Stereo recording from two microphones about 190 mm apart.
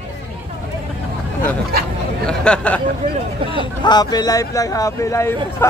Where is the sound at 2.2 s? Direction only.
5° left (ahead or behind).